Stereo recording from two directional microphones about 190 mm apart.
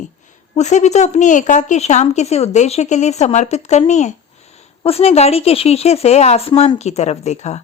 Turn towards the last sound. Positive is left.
turn(degrees=35)  # may be behind; listen again after turning